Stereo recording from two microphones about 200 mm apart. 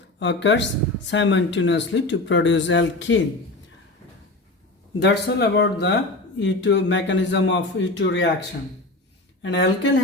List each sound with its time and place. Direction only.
0.2 s speech: 65° left (ahead or behind)
4.9 s speech: 55° left (ahead or behind)
9.4 s speech: 65° left (ahead or behind)